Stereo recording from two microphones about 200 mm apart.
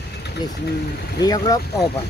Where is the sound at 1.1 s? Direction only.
20° left (ahead or behind).